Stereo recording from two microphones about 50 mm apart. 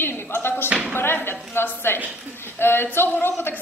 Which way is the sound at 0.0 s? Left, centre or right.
Left.